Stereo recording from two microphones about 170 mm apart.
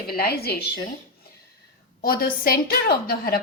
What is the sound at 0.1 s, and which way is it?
Speech, 65° left (ahead or behind).